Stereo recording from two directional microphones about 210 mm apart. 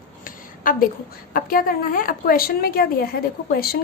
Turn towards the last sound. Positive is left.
turn(degrees=45)  # may be behind; listen again after turning